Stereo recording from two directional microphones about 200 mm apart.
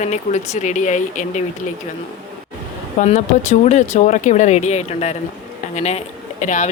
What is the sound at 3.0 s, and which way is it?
Speech, 40° left (ahead or behind).